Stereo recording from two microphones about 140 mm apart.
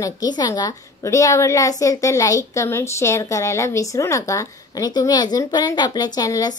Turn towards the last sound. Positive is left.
turn(degrees=25)  # may be behind; listen again after turning